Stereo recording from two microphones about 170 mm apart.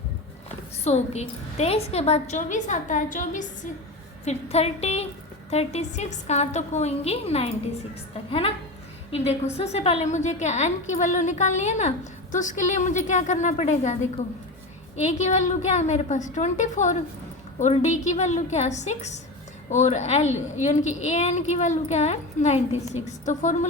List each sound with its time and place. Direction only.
0.9 s a woman's voice: 40° left (ahead or behind)